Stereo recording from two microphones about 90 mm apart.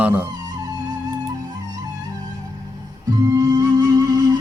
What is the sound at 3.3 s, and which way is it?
Music, 50° right (ahead or behind).